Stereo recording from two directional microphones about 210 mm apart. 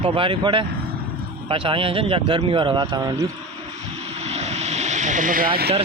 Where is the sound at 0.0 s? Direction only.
25° right (ahead or behind).